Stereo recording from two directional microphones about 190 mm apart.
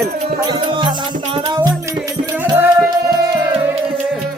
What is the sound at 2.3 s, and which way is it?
Music, 15° right (ahead or behind).